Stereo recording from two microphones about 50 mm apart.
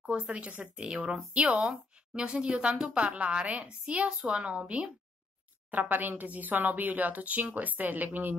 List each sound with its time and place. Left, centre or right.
0.1 s speech: right
5.7 s speech: right